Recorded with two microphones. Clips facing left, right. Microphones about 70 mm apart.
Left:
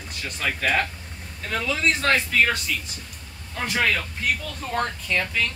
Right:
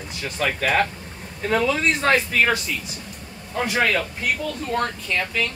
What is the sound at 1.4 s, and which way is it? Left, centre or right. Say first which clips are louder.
Speech: right 4 dB; right.